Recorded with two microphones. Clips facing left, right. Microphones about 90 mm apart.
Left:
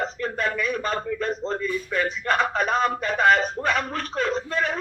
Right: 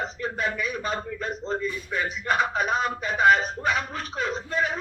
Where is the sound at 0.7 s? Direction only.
10° right (ahead or behind).